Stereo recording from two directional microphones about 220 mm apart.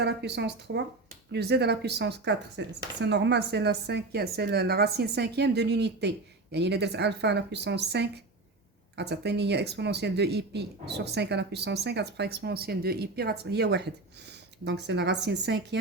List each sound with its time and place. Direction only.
0.0 s speech: 50° right (ahead or behind)